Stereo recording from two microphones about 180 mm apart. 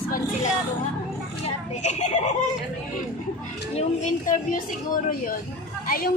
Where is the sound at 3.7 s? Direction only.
40° left (ahead or behind).